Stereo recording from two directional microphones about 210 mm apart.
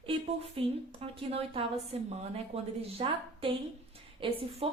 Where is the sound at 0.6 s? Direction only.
25° right (ahead or behind).